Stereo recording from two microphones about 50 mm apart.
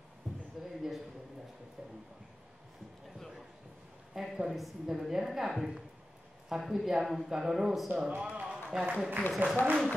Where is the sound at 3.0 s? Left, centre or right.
Centre.